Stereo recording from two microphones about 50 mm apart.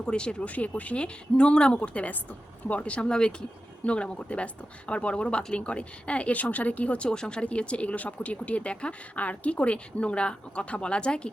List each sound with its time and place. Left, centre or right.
0.0 s speech: centre
0.4 s speech: left